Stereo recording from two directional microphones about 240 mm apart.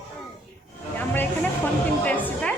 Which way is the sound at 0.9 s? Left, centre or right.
Centre.